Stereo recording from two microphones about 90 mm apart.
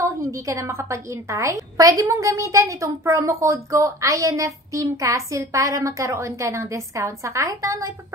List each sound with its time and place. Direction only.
0.0 s a woman's voice: 35° right (ahead or behind)